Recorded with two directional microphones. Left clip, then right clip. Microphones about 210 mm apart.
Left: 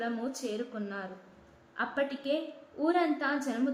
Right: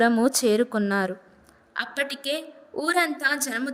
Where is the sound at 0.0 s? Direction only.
45° right (ahead or behind).